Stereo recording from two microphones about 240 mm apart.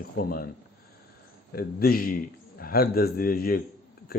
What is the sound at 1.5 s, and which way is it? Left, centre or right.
A man's voice, left.